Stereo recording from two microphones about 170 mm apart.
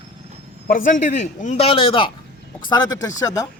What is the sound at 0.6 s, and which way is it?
Speech, 50° left (ahead or behind).